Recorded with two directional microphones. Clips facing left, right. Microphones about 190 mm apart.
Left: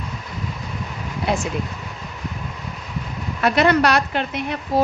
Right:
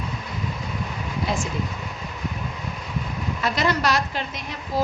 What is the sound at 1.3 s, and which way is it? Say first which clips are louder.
Speech: left 5 dB; 65° left (ahead or behind).